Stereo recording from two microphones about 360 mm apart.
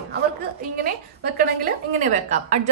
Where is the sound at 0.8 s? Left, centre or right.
Right.